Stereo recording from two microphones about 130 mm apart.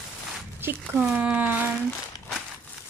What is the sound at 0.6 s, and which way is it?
Speech, 15° right (ahead or behind).